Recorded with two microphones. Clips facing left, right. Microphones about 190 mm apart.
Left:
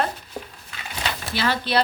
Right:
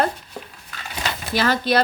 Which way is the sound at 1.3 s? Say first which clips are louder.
Right 3 dB; 45° right (ahead or behind).